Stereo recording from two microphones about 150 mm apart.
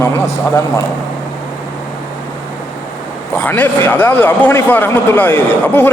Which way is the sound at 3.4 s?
15° left (ahead or behind).